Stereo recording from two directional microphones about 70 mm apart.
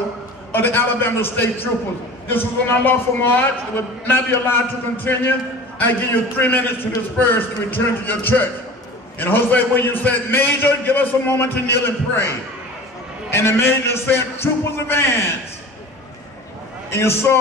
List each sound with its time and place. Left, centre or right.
0.5 s a man's voice: left
6.3 s a man's voice: left
16.9 s a man's voice: left